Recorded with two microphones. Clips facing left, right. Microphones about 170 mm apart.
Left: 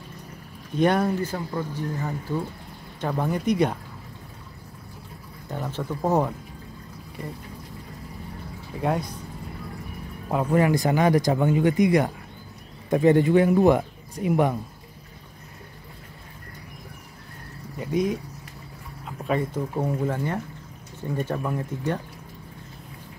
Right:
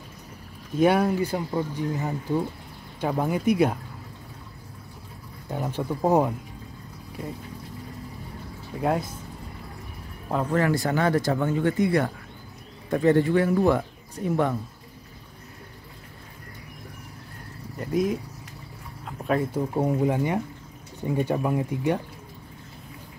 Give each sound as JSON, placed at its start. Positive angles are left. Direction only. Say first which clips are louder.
{"t": 0.7, "sound": "speech", "louder": "right 1 dB", "side_deg": -5}
{"t": 5.5, "sound": "speech", "louder": "right 2 dB", "side_deg": -15}
{"t": 8.7, "sound": "speech", "louder": "right 1 dB", "side_deg": 0}
{"t": 10.3, "sound": "speech", "louder": "left 2 dB", "side_deg": 10}
{"t": 17.7, "sound": "speech", "louder": "even", "side_deg": 0}
{"t": 19.0, "sound": "a sound", "louder": "right 1 dB", "side_deg": 0}
{"t": 19.7, "sound": "speech", "louder": "right 5 dB", "side_deg": -15}